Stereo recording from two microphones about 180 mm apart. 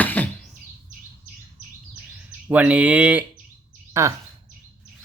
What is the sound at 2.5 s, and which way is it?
Speech, 10° right (ahead or behind).